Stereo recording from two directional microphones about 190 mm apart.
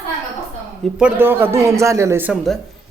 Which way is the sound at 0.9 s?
10° right (ahead or behind).